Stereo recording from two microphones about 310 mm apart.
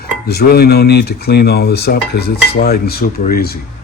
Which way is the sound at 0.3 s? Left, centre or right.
Left.